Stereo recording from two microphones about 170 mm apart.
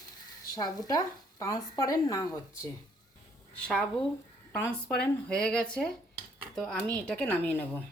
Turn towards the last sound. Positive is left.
turn(degrees=10)  # may be behind; listen again after turning